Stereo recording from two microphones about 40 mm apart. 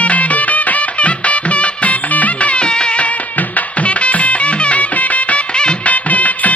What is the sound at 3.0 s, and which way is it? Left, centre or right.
Music, left.